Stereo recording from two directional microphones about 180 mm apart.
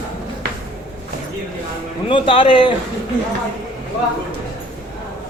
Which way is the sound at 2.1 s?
30° left (ahead or behind).